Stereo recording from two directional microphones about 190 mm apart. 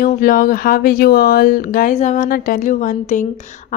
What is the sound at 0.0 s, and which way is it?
A woman's voice, 50° left (ahead or behind).